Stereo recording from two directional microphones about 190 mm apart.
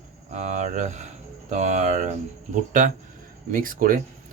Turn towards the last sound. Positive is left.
turn(degrees=-45)  # may be behind; listen again after turning